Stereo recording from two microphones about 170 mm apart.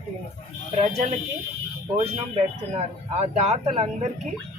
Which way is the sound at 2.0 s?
40° right (ahead or behind).